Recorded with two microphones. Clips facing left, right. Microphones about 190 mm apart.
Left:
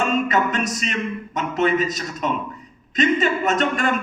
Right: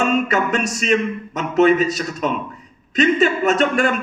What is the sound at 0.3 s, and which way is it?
A man's voice, 45° right (ahead or behind).